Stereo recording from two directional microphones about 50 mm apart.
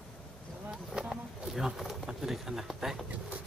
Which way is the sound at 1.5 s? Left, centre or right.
Centre.